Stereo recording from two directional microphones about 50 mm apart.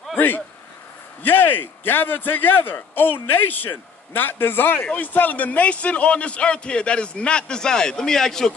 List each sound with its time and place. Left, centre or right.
1.2 s a man's voice: left; by 8.5 s centre